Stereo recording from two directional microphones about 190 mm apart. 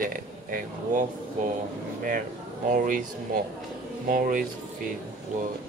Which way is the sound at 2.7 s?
45° right (ahead or behind).